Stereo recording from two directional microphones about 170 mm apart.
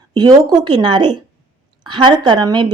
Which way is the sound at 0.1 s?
25° right (ahead or behind).